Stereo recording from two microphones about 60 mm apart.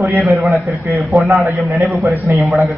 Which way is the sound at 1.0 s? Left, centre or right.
Centre.